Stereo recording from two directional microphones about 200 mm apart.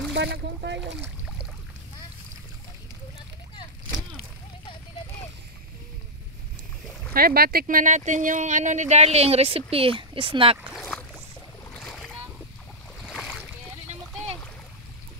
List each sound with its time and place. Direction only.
0.1 s speech: 60° right (ahead or behind)
1.0 s a sound: 5° right (ahead or behind)
7.2 s speech: 45° right (ahead or behind); by 10.6 s 25° right (ahead or behind)
10.7 s boat: 5° left (ahead or behind)
11.7 s splash: 5° left (ahead or behind)
13.0 s boat: centre (ahead or behind)